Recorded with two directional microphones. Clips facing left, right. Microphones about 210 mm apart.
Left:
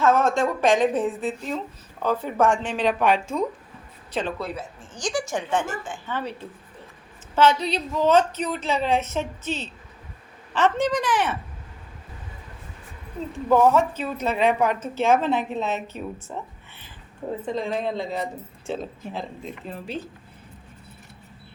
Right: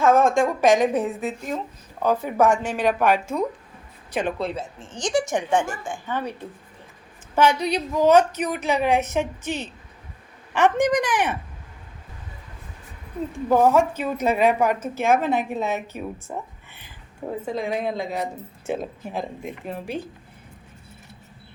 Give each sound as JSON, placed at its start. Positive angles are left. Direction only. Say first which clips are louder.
{"t": 0.0, "sound": "speech", "louder": "right 2 dB", "side_deg": -10}
{"t": 4.4, "sound": "speech", "louder": "right 4 dB", "side_deg": -25}
{"t": 13.7, "sound": "speech", "louder": "right 2 dB", "side_deg": -10}